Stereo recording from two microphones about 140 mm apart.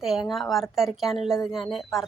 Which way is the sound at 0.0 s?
Centre (ahead or behind).